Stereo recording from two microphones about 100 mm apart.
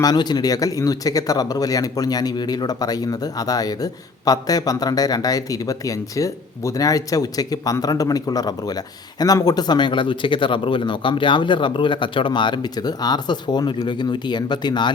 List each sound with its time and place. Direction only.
0.0 s speech: 45° left (ahead or behind)